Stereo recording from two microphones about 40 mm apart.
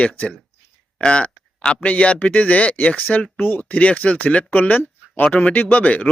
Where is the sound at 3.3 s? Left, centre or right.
Left.